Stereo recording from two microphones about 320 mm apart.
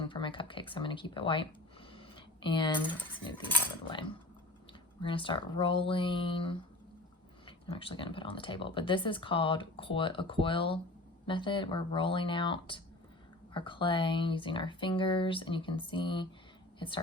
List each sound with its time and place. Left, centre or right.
0.0 s speech: centre
1.9 s cutlery: centre
5.0 s speech: centre